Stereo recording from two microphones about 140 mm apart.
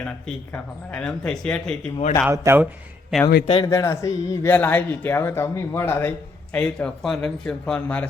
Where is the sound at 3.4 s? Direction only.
40° left (ahead or behind).